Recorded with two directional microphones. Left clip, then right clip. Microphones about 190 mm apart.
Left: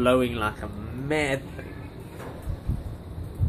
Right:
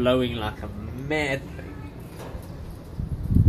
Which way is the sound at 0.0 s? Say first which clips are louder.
Left 1 dB; 10° left (ahead or behind).